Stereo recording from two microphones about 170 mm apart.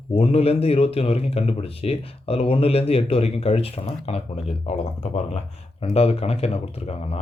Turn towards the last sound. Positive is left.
turn(degrees=40)  # may be behind; listen again after turning